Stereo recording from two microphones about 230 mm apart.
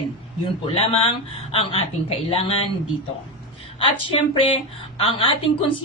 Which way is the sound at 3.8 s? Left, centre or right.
Left.